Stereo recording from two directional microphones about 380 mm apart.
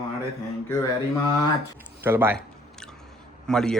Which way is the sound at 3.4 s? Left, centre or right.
Centre.